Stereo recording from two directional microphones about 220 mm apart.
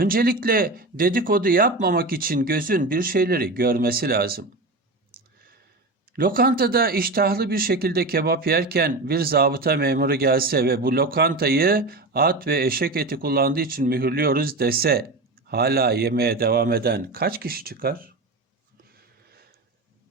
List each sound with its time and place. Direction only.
0.0 s speech: 40° right (ahead or behind)
6.1 s speech: 40° right (ahead or behind)